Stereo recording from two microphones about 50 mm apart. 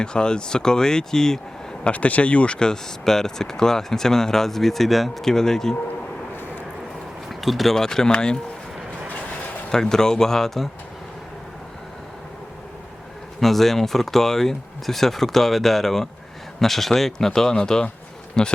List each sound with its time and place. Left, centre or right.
0.0 s speech: centre
1.8 s speech: left; by 5.7 s centre
7.3 s speech: centre
9.7 s speech: centre
13.4 s speech: centre